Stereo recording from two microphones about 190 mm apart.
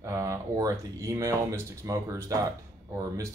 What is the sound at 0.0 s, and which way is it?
Speech, 15° right (ahead or behind).